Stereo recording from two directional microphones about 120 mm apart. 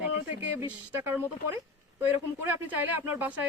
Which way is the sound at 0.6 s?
20° right (ahead or behind).